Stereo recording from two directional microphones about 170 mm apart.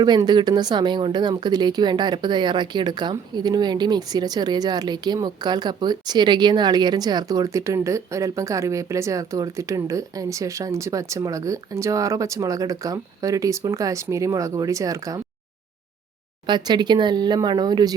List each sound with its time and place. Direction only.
0.0 s speech: 25° right (ahead or behind)
16.5 s speech: 25° right (ahead or behind)